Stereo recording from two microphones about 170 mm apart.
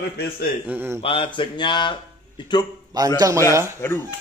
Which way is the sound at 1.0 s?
30° left (ahead or behind).